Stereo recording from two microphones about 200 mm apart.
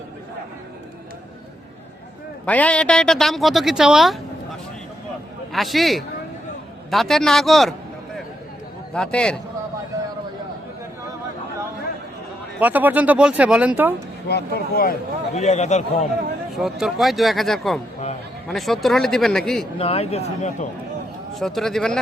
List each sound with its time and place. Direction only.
2.5 s speech: 5° left (ahead or behind)
5.5 s a man's voice: centre (ahead or behind)
8.9 s speech: 5° left (ahead or behind)
12.5 s speech: 10° right (ahead or behind)
14.3 s speech: 55° left (ahead or behind)
15.4 s speech: 35° left (ahead or behind)
16.5 s speech: centre (ahead or behind)
19.8 s speech: 30° left (ahead or behind)
21.3 s speech: centre (ahead or behind)